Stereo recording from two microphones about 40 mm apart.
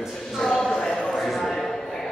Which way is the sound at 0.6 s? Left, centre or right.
Centre.